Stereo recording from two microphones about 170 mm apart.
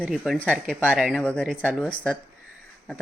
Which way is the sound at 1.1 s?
10° left (ahead or behind).